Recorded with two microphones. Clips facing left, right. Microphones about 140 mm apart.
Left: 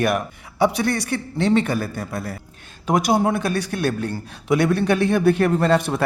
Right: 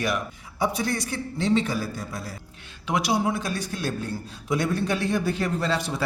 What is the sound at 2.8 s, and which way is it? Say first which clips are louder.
A man's voice: left 6 dB; 45° left (ahead or behind).